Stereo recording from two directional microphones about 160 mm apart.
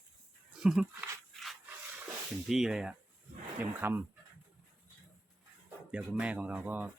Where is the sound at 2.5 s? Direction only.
5° right (ahead or behind).